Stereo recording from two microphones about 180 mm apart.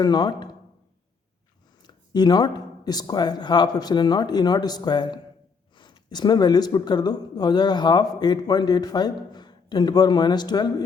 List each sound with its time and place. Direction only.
0.0 s speech: 20° left (ahead or behind)
1.8 s speech: 25° left (ahead or behind)